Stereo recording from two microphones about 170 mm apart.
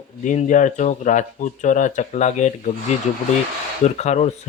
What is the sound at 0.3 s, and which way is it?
Speech, 45° left (ahead or behind).